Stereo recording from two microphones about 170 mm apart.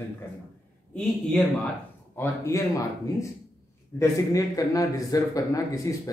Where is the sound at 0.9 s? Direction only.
5° left (ahead or behind).